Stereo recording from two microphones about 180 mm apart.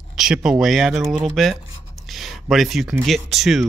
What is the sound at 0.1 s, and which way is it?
Speech, 5° right (ahead or behind).